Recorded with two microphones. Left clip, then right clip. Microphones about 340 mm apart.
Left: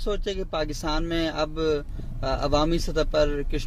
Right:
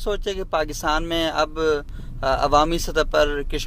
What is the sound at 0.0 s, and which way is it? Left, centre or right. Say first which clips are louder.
Speech: right 3 dB; right.